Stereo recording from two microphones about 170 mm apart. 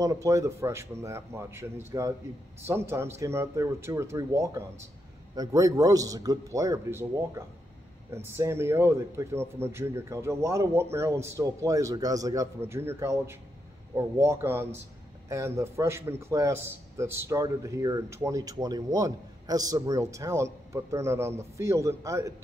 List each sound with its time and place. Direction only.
0.0 s a man's voice: 20° right (ahead or behind)